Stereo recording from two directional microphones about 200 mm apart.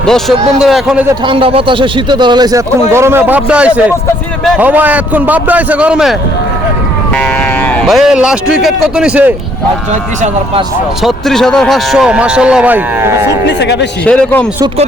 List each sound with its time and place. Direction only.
0.0 s speech: centre (ahead or behind)
1.2 s a man's voice: 25° right (ahead or behind); by 9.3 s 5° right (ahead or behind)
11.0 s speech: centre (ahead or behind)
13.6 s a man's voice: 60° left (ahead or behind)
14.0 s a man's voice: 5° left (ahead or behind)